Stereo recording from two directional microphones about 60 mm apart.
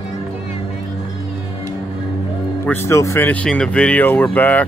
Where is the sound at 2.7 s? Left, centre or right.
Left.